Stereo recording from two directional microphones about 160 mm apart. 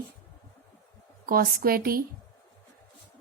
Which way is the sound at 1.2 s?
65° right (ahead or behind).